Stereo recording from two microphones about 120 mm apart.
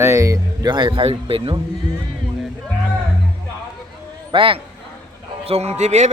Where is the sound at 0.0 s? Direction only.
25° right (ahead or behind); by 1.6 s 45° right (ahead or behind).